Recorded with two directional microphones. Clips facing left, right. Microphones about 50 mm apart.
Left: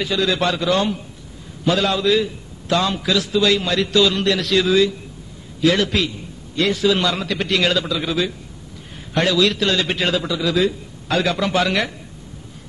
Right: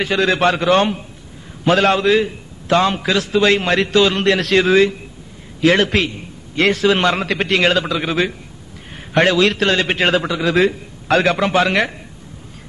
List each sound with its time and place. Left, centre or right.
0.0 s a man's voice: right